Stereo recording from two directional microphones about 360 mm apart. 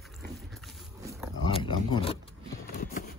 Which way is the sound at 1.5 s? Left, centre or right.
Centre.